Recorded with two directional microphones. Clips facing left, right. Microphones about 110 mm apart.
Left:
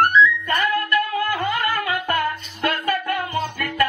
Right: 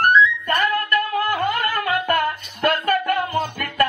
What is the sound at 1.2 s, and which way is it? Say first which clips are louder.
Music: right 1 dB; 50° right (ahead or behind).